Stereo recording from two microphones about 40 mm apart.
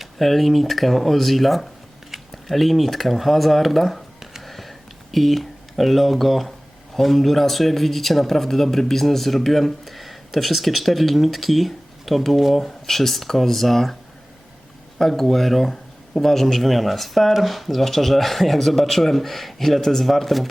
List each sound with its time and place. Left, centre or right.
0.2 s speech: centre
4.4 s a sound: centre
5.1 s speech: centre
14.9 s speech: centre